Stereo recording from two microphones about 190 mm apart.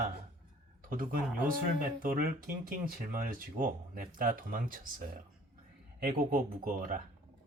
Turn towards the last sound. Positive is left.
turn(degrees=-50)  # may be behind; listen again after turning